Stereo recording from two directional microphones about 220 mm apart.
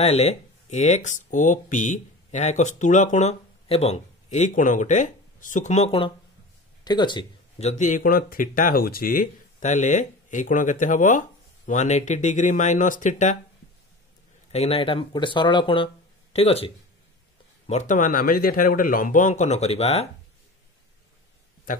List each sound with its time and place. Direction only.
0.0 s speech: 30° left (ahead or behind)
14.5 s speech: 30° left (ahead or behind)